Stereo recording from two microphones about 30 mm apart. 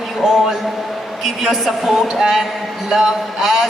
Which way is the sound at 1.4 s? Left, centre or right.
Centre.